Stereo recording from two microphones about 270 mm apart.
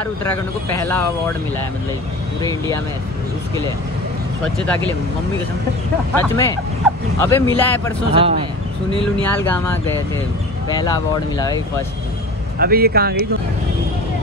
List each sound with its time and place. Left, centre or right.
0.7 s speech: centre
6.1 s speech: centre
8.1 s speech: right
9.2 s speech: centre
12.5 s speech: right